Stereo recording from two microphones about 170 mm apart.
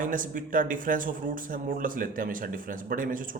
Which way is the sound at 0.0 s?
50° right (ahead or behind).